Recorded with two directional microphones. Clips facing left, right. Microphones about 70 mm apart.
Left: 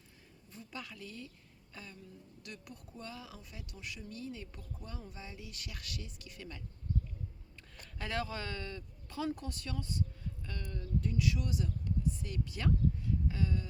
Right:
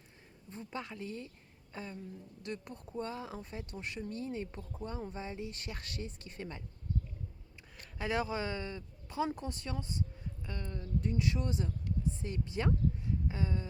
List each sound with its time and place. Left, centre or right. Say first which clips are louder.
0.5 s speech: right 5 dB; right
7.9 s speech: right 4 dB; centre